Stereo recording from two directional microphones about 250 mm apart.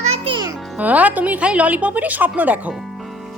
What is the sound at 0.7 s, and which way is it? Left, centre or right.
Speech, centre.